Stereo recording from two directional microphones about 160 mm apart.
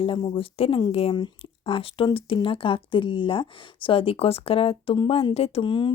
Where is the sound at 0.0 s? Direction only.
35° left (ahead or behind).